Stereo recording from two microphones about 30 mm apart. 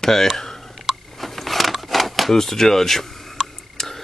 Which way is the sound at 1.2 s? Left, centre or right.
Centre.